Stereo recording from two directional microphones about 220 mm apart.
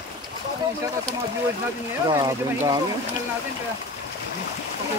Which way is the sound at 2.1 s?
15° right (ahead or behind).